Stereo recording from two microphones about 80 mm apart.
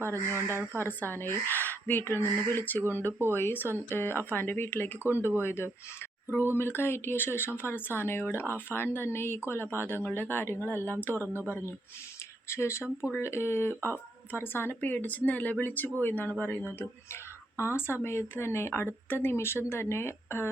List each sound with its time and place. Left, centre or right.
0.3 s speech: right
0.8 s speech: left
3.1 s speech: right
3.3 s speech: left
5.0 s speech: right
5.4 s speech: left
12.5 s speech: left
17.7 s speech: left